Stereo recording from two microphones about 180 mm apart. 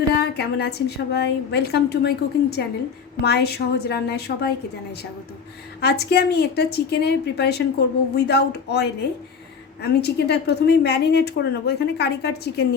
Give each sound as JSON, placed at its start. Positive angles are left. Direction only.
{"t": 0.1, "sound": "a woman's voice", "side_deg": 65}
{"t": 5.8, "sound": "a woman's voice", "side_deg": 65}